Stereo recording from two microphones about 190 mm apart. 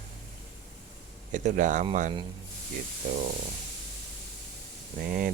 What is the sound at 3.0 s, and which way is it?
Speech, 50° right (ahead or behind).